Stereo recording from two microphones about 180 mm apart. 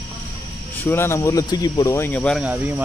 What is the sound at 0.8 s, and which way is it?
Speech, 10° left (ahead or behind).